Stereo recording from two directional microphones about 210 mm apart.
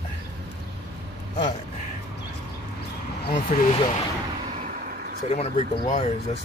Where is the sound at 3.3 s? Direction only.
35° left (ahead or behind).